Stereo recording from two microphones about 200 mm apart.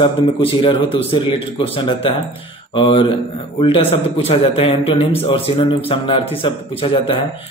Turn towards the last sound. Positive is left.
turn(degrees=25)  # may be behind; listen again after turning